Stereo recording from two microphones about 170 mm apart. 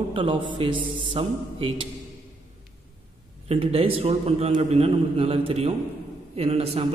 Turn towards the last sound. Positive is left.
turn(degrees=-35)  # may be behind; listen again after turning